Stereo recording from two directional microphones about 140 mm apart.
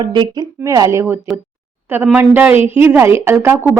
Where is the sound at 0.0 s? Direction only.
30° right (ahead or behind).